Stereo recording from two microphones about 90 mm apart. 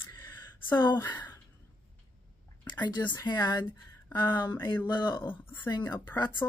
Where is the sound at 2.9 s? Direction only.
55° left (ahead or behind).